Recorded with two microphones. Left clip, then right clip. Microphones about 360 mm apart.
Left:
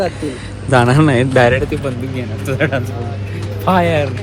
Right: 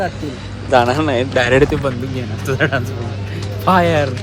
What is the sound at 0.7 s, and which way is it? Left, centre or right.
Speech, centre.